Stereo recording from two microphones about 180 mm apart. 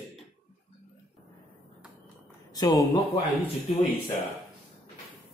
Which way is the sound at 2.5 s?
20° left (ahead or behind).